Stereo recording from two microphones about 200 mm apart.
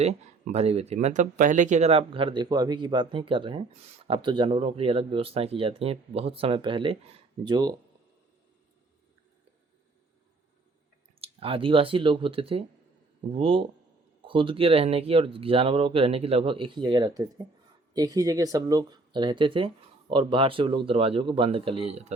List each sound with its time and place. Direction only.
0.0 s speech: 35° right (ahead or behind)
11.2 s speech: 25° right (ahead or behind)